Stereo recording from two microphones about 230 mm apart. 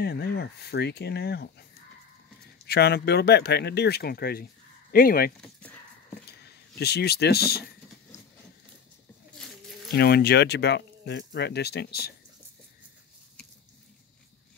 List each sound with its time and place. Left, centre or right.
0.0 s speech: left
2.6 s speech: left
5.4 s a sound: centre
6.2 s speech: left
9.9 s speech: left